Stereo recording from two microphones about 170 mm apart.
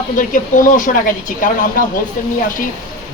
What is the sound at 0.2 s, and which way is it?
Speech, 55° left (ahead or behind).